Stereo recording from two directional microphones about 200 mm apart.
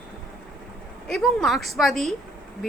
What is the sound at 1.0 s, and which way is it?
A woman's voice, centre (ahead or behind).